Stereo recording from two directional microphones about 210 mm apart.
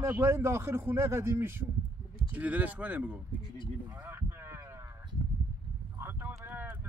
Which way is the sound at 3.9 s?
10° right (ahead or behind).